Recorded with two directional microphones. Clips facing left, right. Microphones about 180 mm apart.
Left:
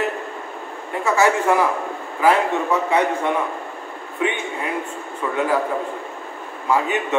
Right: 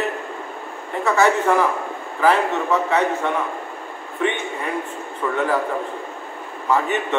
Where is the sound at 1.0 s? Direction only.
10° left (ahead or behind).